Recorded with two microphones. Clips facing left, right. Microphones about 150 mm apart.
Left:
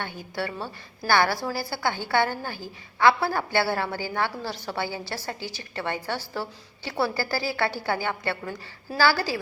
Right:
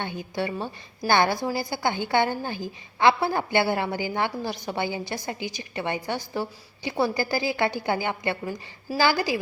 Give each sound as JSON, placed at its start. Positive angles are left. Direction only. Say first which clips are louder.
{"t": 0.0, "sound": "a woman's voice", "louder": "right 2 dB", "side_deg": -20}